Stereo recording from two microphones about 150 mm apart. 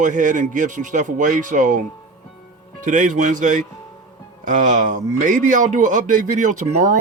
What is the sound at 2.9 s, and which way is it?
A man's voice, 60° right (ahead or behind).